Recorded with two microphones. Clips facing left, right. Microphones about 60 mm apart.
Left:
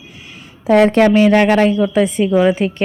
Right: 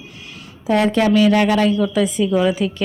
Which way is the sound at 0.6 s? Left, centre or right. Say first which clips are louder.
Left 5 dB; left.